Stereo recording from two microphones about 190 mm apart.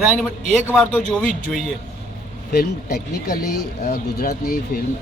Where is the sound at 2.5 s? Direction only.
55° left (ahead or behind).